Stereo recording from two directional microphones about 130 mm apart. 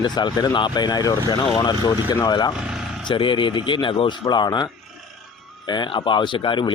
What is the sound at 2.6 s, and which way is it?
Vehicle, 5° right (ahead or behind).